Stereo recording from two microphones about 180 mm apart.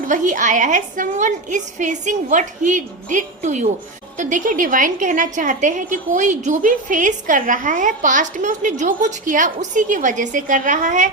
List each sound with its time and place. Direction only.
0.1 s a woman's voice: 45° right (ahead or behind)